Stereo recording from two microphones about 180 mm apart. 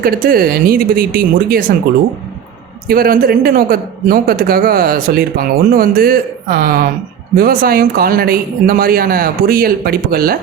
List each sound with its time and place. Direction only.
0.0 s a man's voice: 55° right (ahead or behind)
2.8 s a man's voice: 55° right (ahead or behind)